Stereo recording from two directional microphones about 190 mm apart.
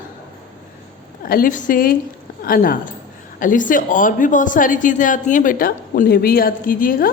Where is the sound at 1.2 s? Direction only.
50° left (ahead or behind).